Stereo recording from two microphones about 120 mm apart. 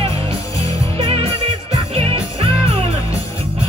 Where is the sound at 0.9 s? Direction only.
50° right (ahead or behind).